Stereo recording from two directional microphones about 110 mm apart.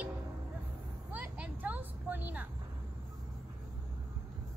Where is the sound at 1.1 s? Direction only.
15° right (ahead or behind).